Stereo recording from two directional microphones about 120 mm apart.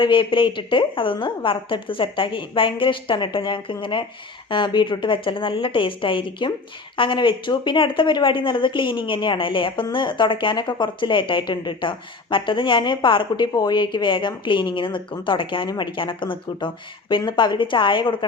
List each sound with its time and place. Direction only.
0.0 s a woman's voice: 45° left (ahead or behind)